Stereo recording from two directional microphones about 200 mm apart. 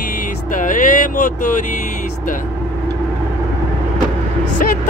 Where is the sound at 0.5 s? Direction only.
40° left (ahead or behind).